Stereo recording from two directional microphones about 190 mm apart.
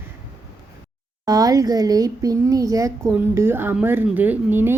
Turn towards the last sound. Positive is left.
turn(degrees=-10)  # may be behind; listen again after turning